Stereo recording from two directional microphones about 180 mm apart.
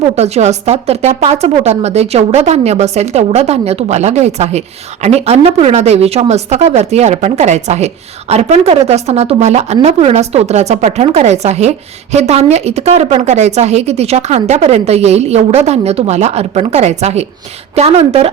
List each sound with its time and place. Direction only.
0.2 s a woman's voice: 35° right (ahead or behind)